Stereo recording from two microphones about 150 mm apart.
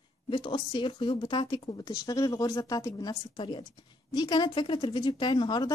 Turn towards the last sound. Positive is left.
turn(degrees=30)  # may be behind; listen again after turning